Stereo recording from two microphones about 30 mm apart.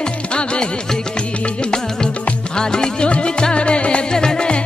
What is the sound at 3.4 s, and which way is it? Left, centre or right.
Music, left.